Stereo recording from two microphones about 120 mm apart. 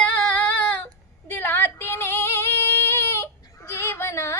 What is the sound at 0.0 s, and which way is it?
Female singing, 10° left (ahead or behind).